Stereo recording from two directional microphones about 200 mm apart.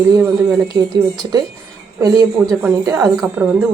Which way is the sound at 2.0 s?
20° right (ahead or behind).